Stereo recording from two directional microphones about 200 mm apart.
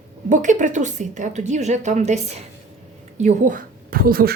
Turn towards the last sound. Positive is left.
turn(degrees=-45)  # may be behind; listen again after turning